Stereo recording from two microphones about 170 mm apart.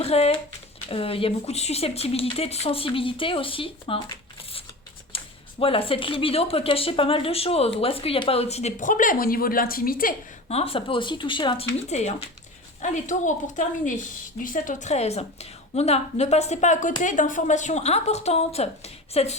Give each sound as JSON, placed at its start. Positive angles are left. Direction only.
{"t": 0.0, "sound": "speech", "side_deg": 35}
{"t": 5.1, "sound": "speech", "side_deg": 35}
{"t": 10.5, "sound": "speech", "side_deg": 35}
{"t": 11.9, "sound": "a woman's voice", "side_deg": 40}